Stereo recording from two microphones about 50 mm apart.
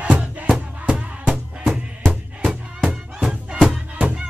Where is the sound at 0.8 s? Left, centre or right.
Right.